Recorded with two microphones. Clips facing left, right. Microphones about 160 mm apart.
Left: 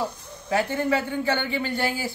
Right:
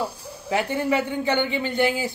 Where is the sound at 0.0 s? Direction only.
15° right (ahead or behind).